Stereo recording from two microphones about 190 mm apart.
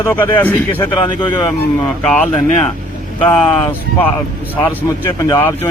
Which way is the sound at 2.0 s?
5° left (ahead or behind).